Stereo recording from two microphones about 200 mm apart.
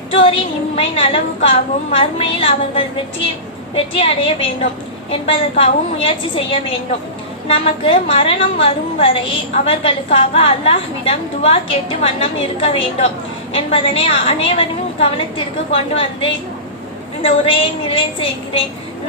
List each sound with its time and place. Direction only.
0.1 s a woman's voice: 25° left (ahead or behind)
3.9 s a woman's voice: 30° left (ahead or behind)
15.7 s a woman's voice: 25° left (ahead or behind)